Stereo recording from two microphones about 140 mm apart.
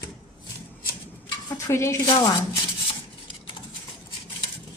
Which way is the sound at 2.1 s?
35° left (ahead or behind).